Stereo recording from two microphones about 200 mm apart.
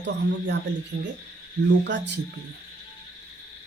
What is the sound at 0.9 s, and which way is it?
Speech, 70° right (ahead or behind).